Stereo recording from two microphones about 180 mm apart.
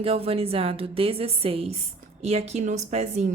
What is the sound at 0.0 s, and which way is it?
A woman's voice, 35° right (ahead or behind).